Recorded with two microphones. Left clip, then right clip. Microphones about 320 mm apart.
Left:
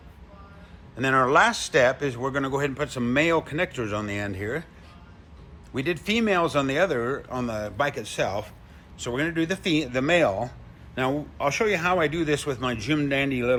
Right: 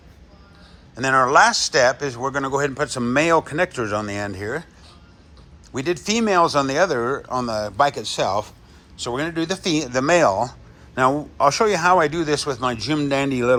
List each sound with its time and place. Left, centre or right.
0.9 s speech: centre
5.7 s speech: centre
9.6 s speech: right
9.9 s speech: centre
11.3 s speech: centre